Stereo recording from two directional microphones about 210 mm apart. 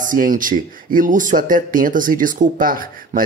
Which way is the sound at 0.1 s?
40° right (ahead or behind).